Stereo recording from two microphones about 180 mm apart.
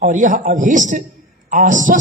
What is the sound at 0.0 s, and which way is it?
A man's voice, 45° right (ahead or behind).